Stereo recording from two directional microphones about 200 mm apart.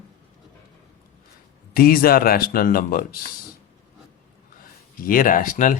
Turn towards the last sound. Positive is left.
turn(degrees=40)  # may be behind; listen again after turning